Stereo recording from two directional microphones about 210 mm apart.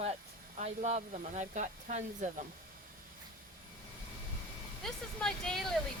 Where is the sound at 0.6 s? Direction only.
30° right (ahead or behind).